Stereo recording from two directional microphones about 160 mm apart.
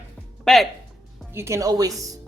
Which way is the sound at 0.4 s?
Centre (ahead or behind).